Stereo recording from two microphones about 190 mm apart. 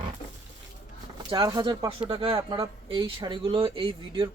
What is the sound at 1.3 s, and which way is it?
Speech, 20° right (ahead or behind).